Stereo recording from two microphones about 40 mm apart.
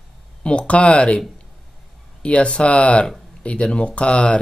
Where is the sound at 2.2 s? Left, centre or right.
Left.